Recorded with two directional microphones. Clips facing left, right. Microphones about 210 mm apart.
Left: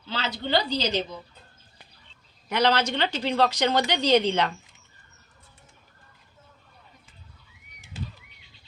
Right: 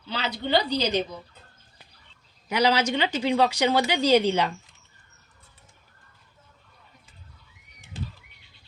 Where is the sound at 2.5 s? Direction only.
10° right (ahead or behind).